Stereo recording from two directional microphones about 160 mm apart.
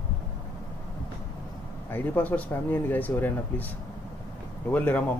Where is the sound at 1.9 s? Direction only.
10° left (ahead or behind).